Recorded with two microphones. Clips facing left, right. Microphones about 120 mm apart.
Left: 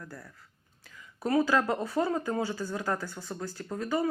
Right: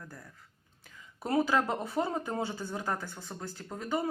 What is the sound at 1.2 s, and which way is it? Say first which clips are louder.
Speech: left 2 dB; 20° right (ahead or behind).